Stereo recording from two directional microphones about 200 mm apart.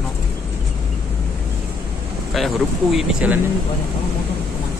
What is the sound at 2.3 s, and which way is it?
Speech, centre (ahead or behind).